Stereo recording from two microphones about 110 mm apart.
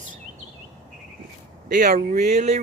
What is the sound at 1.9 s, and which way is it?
Speech, 90° right.